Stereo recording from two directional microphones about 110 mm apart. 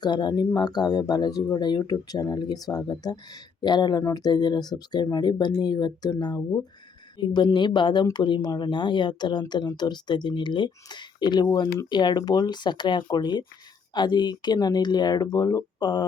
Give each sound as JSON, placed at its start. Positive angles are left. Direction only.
{"t": 0.0, "sound": "speech", "side_deg": 40}